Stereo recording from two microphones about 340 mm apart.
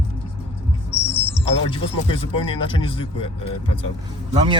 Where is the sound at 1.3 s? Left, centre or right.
Centre.